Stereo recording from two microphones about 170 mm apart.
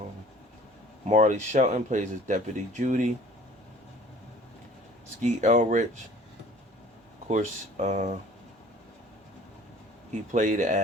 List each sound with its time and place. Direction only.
1.0 s speech: 45° right (ahead or behind)
5.2 s speech: 45° right (ahead or behind)
7.3 s speech: 45° right (ahead or behind)
10.3 s speech: 45° right (ahead or behind)